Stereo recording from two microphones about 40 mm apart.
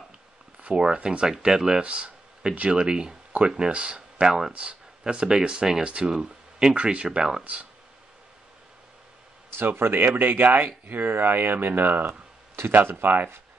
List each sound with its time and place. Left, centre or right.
0.6 s speech: right
1.8 s a sound: right
2.7 s speech: right
4.5 s speech: right
6.1 s a sound: centre
6.7 s speech: right
7.1 s speech: centre
9.6 s speech: right